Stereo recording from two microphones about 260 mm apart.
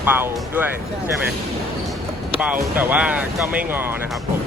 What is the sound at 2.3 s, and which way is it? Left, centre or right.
Speech, centre.